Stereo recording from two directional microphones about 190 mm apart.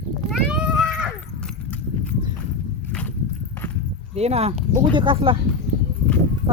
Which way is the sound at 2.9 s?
5° left (ahead or behind).